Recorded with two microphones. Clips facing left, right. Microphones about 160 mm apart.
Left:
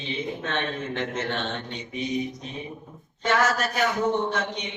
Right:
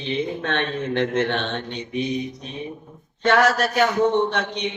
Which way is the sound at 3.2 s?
70° right (ahead or behind).